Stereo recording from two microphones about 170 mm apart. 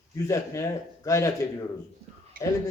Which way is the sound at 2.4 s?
60° right (ahead or behind).